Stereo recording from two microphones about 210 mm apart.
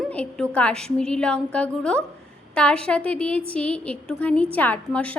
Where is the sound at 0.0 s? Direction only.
5° left (ahead or behind).